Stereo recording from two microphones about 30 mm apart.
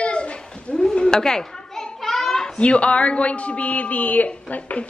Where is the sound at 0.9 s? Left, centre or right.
Left.